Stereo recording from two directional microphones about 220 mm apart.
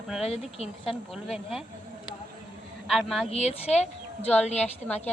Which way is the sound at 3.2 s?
30° left (ahead or behind).